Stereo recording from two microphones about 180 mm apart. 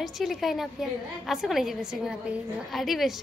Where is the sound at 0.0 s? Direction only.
Centre (ahead or behind).